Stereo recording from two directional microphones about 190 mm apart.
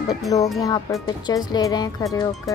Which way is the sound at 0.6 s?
20° left (ahead or behind).